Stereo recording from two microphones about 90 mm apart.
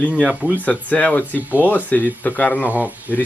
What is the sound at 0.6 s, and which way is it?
Speech, 15° left (ahead or behind).